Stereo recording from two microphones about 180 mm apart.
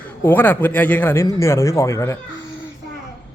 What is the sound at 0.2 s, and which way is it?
Speech, 10° left (ahead or behind).